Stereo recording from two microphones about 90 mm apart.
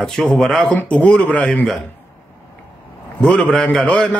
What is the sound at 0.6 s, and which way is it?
Speech, 15° left (ahead or behind).